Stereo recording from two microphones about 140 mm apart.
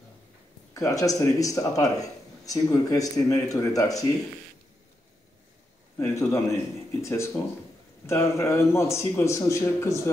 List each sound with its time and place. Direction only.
0.7 s speech: 25° left (ahead or behind)
5.9 s speech: 25° left (ahead or behind)